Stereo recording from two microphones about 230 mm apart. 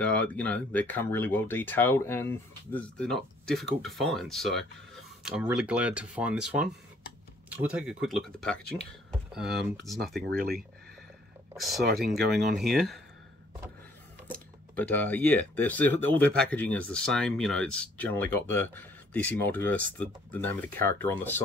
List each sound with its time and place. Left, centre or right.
0.0 s speech: centre
9.5 s speech: right
9.8 s speech: centre
10.3 s speech: right
11.5 s speech: centre
11.8 s speech: right
12.1 s speech: centre
14.2 s speech: centre